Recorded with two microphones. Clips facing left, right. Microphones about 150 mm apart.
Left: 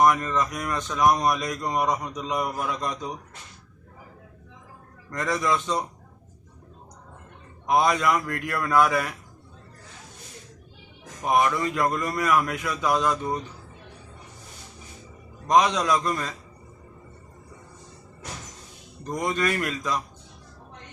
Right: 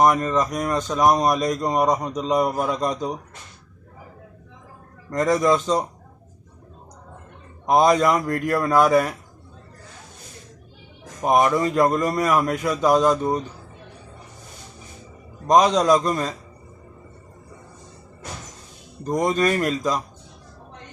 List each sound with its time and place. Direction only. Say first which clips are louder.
0.0 s speech: right 3 dB; 35° right (ahead or behind)
5.1 s speech: right 7 dB; 40° right (ahead or behind)
7.7 s speech: right 5 dB; 40° right (ahead or behind)
11.2 s speech: right 4 dB; 40° right (ahead or behind)
15.4 s speech: right 5 dB; 40° right (ahead or behind)
19.0 s speech: right 6 dB; 35° right (ahead or behind)